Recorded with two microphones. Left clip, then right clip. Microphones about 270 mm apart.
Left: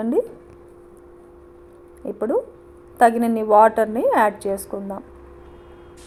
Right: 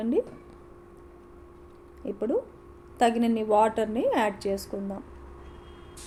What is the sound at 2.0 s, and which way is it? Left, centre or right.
Speech, centre.